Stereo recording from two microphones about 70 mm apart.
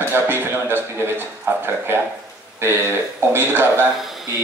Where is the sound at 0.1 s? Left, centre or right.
Right.